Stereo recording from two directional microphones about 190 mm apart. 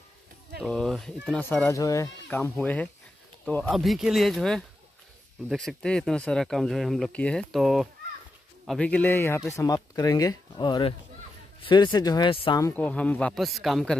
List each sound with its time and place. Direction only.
0.6 s speech: centre (ahead or behind); by 12.5 s 25° left (ahead or behind)
12.5 s speech: 10° left (ahead or behind)